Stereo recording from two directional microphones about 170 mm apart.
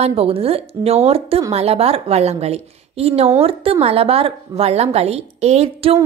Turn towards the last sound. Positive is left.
turn(degrees=-40)  # may be behind; listen again after turning